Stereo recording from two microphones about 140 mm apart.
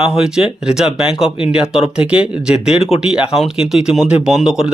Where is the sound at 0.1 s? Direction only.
5° right (ahead or behind).